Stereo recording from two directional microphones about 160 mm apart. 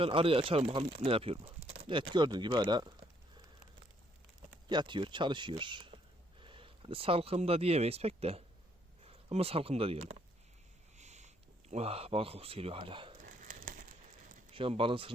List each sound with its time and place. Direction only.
0.0 s speech: 35° right (ahead or behind)
4.7 s speech: 30° right (ahead or behind)
10.9 s a sound: 45° right (ahead or behind)
11.7 s speech: 40° right (ahead or behind)
13.2 s crumpling: 55° right (ahead or behind)
14.5 s speech: 35° right (ahead or behind)